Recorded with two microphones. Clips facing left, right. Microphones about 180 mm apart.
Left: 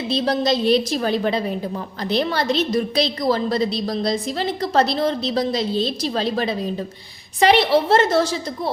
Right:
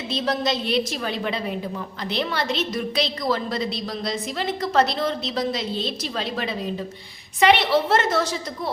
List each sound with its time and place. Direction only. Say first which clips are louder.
0.1 s a woman's voice: left 4 dB; 35° left (ahead or behind)